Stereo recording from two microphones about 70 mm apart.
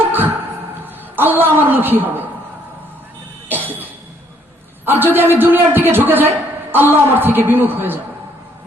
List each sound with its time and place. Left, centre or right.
1.1 s a man's voice: right
3.5 s cough: right
4.9 s a man's voice: right